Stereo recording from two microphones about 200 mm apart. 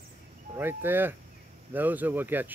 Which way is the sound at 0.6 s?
10° right (ahead or behind).